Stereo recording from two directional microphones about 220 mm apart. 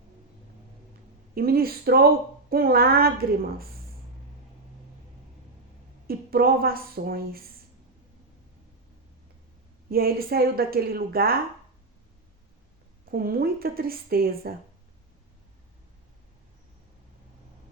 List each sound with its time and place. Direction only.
1.4 s a woman's voice: 45° right (ahead or behind)
6.1 s a woman's voice: 45° right (ahead or behind)
9.9 s a woman's voice: 45° right (ahead or behind)
13.1 s a woman's voice: 40° right (ahead or behind)